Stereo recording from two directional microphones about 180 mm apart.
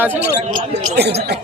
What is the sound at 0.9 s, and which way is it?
Speech, 65° right (ahead or behind).